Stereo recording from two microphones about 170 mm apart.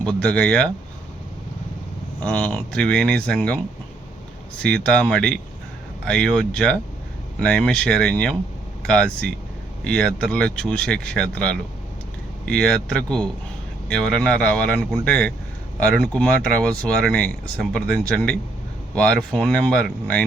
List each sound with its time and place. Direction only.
0.0 s speech: 5° left (ahead or behind)
2.2 s speech: 5° left (ahead or behind)
4.6 s speech: 5° left (ahead or behind)